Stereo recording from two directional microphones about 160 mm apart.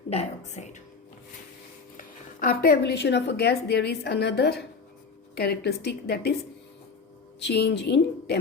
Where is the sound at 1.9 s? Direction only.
65° left (ahead or behind); by 6.4 s 80° left.